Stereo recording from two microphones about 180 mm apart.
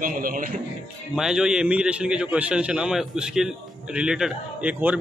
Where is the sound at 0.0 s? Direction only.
50° right (ahead or behind).